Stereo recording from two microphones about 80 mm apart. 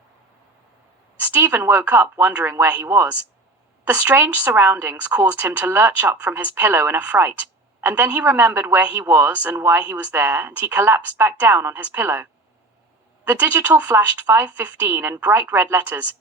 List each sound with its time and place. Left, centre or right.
1.2 s a woman's voice: right
2.8 s speech: right
3.8 s speech: right